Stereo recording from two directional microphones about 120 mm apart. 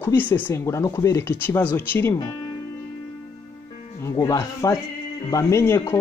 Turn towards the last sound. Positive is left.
turn(degrees=20)  # may be behind; listen again after turning